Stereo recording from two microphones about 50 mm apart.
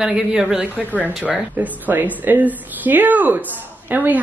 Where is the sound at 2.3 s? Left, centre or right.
Right.